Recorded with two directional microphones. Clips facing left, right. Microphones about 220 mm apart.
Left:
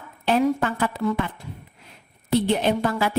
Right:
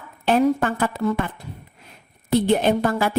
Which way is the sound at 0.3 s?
50° right (ahead or behind).